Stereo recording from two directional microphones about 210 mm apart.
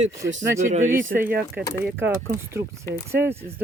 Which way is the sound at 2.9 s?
10° right (ahead or behind).